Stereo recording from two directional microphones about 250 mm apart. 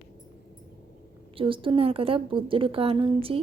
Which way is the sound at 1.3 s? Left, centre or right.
Right.